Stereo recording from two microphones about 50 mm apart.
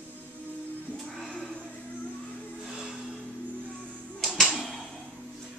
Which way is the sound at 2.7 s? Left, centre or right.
Centre.